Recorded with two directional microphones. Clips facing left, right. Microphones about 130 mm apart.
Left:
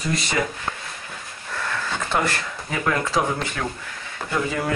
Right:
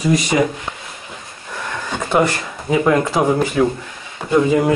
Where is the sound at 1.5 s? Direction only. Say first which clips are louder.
Right 2 dB; 15° right (ahead or behind).